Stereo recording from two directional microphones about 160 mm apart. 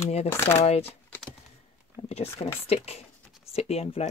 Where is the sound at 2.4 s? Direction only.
40° left (ahead or behind).